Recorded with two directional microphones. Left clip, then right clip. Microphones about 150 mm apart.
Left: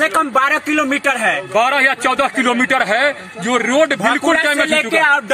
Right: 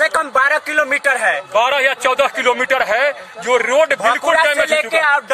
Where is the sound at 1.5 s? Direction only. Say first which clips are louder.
Left 2 dB; 60° right (ahead or behind).